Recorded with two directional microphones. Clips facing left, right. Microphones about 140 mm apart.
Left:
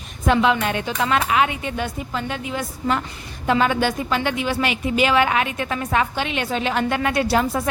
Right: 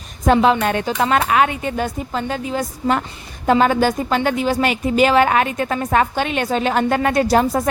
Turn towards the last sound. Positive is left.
turn(degrees=-40)  # may be behind; listen again after turning